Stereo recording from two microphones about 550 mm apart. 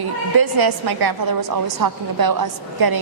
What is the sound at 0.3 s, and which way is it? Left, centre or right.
A woman's voice, right.